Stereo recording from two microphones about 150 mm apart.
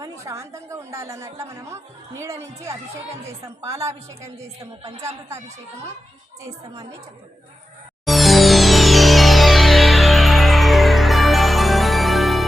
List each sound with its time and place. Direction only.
0.0 s a woman's voice: 20° right (ahead or behind)
8.0 s music: centre (ahead or behind)